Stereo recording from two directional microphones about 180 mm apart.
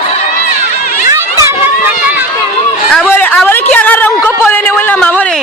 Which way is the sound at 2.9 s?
5° left (ahead or behind).